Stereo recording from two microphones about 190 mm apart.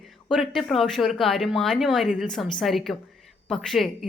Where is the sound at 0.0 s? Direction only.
Centre (ahead or behind).